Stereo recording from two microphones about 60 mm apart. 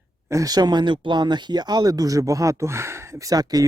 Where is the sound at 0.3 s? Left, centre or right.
Right.